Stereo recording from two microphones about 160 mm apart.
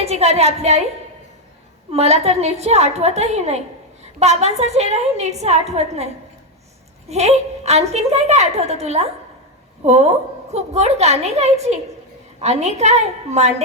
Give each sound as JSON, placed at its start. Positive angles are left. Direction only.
{"t": 0.0, "sound": "a woman's voice", "side_deg": -40}
{"t": 1.9, "sound": "a woman's voice", "side_deg": -40}
{"t": 7.1, "sound": "a woman's voice", "side_deg": -45}